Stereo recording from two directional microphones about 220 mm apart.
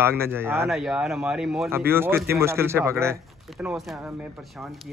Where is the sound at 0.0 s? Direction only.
10° right (ahead or behind).